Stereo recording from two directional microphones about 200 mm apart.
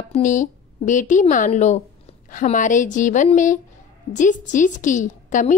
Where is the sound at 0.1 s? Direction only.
40° left (ahead or behind).